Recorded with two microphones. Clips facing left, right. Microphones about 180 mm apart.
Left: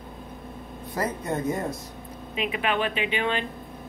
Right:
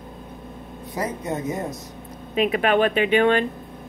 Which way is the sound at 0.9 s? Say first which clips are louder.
Right 1 dB; 20° right (ahead or behind).